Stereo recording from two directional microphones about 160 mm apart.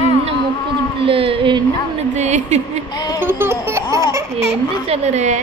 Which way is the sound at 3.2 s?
15° right (ahead or behind).